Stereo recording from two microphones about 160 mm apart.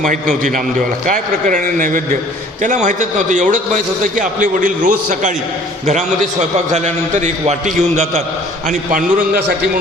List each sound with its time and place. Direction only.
1.0 s a man's voice: 55° right (ahead or behind)
8.9 s a man's voice: 60° right (ahead or behind)